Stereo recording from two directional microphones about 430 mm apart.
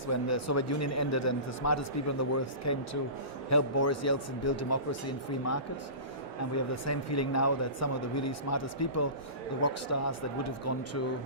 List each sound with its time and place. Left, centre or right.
0.1 s speech: left
6.8 s speech: left